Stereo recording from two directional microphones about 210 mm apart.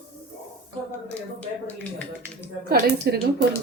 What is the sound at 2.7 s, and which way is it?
Speech, 45° right (ahead or behind).